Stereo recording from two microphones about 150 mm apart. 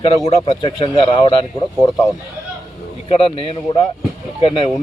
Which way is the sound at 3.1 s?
40° left (ahead or behind).